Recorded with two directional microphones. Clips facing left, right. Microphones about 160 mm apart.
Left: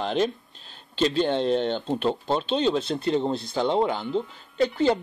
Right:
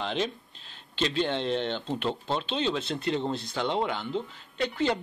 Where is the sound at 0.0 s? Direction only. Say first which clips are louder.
Left 6 dB; 45° left (ahead or behind).